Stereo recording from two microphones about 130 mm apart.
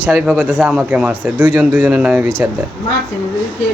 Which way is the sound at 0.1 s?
10° right (ahead or behind).